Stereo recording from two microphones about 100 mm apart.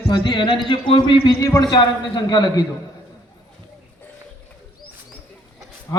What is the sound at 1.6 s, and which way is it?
A man's voice, 50° left (ahead or behind).